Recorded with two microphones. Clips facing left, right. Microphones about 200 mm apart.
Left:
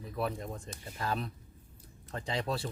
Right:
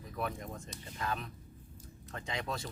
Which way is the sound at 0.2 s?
30° left (ahead or behind).